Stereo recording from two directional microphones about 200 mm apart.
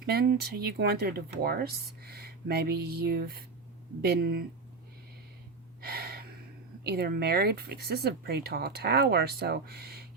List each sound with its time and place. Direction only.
0.0 s speech: 50° right (ahead or behind)
5.8 s gasp: 55° right (ahead or behind)
6.8 s speech: 55° right (ahead or behind)